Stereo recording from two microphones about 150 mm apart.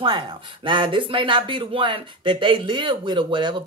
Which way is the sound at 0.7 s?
35° right (ahead or behind).